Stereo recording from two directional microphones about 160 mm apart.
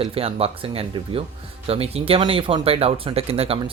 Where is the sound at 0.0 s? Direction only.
35° right (ahead or behind).